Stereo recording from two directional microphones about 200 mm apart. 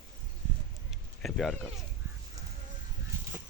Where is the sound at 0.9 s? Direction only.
Centre (ahead or behind).